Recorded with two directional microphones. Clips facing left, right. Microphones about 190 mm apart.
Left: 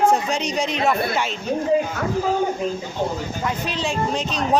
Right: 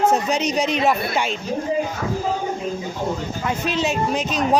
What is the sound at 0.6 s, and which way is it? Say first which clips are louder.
Speech: left 1 dB; 15° right (ahead or behind).